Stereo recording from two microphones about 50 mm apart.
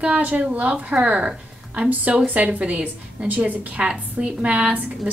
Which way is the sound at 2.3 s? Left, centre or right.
Right.